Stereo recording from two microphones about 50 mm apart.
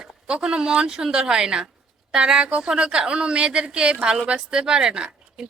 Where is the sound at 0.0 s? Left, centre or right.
Centre.